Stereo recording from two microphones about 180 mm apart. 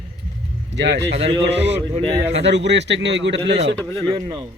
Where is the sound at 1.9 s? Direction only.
25° right (ahead or behind).